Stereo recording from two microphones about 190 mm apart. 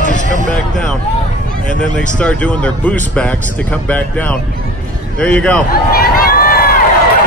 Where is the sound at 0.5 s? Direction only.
5° left (ahead or behind).